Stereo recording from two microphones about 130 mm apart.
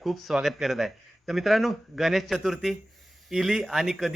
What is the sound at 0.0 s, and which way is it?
A man's voice, centre (ahead or behind).